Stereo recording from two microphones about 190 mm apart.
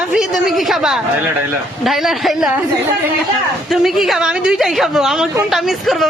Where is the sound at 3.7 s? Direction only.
Centre (ahead or behind).